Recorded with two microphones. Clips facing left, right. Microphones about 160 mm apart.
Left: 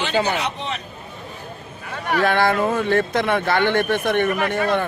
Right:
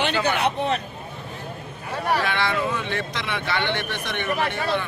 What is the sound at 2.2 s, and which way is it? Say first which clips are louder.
Speech: left 6 dB; 50° left (ahead or behind).